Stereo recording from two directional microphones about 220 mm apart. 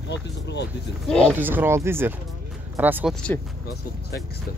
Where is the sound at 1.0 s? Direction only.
5° left (ahead or behind).